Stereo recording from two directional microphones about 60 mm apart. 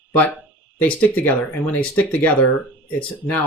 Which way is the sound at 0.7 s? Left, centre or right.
Left.